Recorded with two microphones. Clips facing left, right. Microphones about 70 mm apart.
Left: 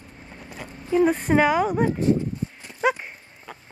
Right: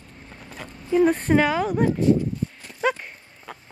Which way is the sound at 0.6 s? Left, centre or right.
Centre.